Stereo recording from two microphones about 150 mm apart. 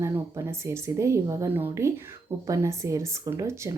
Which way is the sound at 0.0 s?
20° right (ahead or behind).